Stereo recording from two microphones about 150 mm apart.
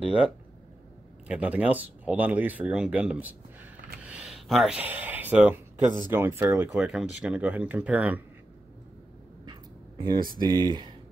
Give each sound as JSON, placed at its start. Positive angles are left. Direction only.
{"t": 1.2, "sound": "speech", "side_deg": -10}
{"t": 6.8, "sound": "speech", "side_deg": -5}
{"t": 9.5, "sound": "a sound", "side_deg": -30}
{"t": 10.4, "sound": "speech", "side_deg": -30}